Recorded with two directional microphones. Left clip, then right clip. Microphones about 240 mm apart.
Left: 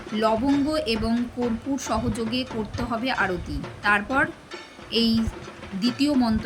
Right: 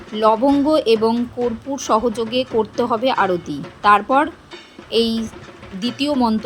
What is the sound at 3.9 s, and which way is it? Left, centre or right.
Speech, right.